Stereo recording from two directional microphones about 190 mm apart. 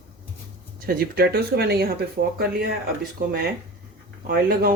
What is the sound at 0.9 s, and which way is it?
Speech, 55° right (ahead or behind).